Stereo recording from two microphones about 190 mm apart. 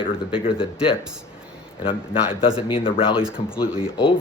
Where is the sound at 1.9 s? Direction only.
25° left (ahead or behind).